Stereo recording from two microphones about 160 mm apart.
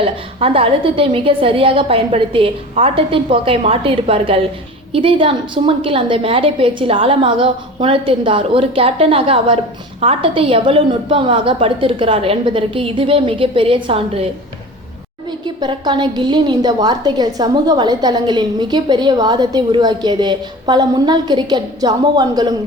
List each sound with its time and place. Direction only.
0.0 s a woman's voice: 35° right (ahead or behind)
15.3 s a woman's voice: 25° right (ahead or behind)